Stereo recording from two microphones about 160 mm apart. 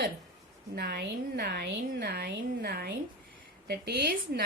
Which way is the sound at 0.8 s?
80° right.